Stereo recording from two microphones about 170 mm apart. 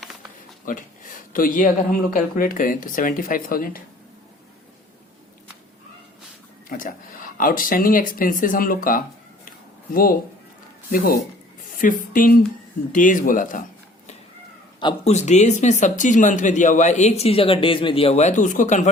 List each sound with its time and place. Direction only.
0.6 s speech: 50° left (ahead or behind)
6.7 s speech: 55° left (ahead or behind)
15.0 s speech: 40° left (ahead or behind)